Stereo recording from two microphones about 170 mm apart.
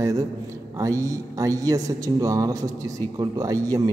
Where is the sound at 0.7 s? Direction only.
20° right (ahead or behind).